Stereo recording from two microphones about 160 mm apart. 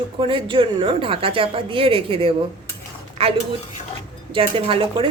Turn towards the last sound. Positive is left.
turn(degrees=-35)  # may be behind; listen again after turning